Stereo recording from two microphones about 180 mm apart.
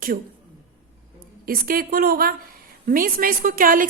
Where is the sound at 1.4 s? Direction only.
55° right (ahead or behind).